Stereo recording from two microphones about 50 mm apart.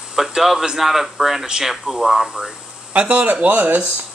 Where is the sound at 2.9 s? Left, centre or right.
Right.